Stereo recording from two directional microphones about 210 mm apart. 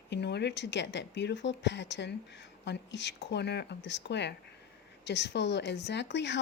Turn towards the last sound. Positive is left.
turn(degrees=55)  # may be behind; listen again after turning